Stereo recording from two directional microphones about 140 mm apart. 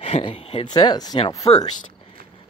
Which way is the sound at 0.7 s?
30° left (ahead or behind).